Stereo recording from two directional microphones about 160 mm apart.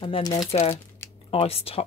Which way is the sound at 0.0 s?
30° left (ahead or behind).